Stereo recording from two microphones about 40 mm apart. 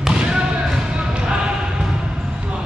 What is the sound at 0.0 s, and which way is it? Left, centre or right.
Basketball bounce, centre.